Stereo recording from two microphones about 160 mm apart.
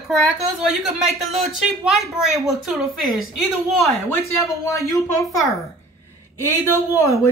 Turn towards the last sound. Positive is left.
turn(degrees=20)  # may be behind; listen again after turning